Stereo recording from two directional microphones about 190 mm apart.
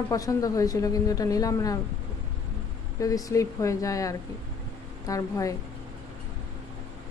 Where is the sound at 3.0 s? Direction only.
15° left (ahead or behind).